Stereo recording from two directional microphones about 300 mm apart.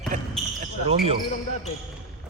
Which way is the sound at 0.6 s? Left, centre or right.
Right.